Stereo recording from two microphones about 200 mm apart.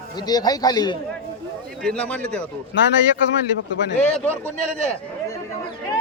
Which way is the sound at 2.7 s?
65° left (ahead or behind).